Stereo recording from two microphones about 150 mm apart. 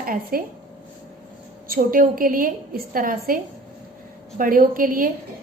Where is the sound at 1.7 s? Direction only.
70° right (ahead or behind).